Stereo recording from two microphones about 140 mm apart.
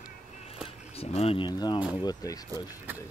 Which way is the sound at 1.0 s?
45° left (ahead or behind).